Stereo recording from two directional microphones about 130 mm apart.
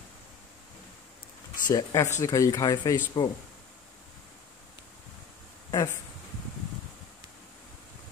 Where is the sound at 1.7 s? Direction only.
25° left (ahead or behind).